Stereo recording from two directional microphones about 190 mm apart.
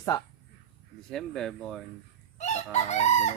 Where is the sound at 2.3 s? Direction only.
35° left (ahead or behind).